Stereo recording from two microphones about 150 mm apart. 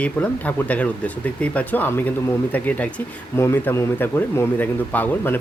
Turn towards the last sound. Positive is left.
turn(degrees=15)  # may be behind; listen again after turning